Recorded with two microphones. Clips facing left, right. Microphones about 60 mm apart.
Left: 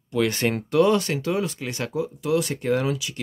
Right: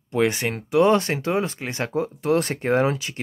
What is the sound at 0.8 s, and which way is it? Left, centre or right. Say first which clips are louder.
Speech: right 2 dB; right.